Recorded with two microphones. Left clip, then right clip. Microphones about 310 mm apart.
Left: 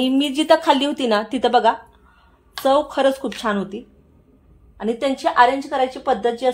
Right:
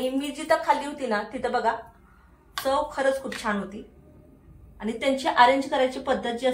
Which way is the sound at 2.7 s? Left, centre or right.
Left.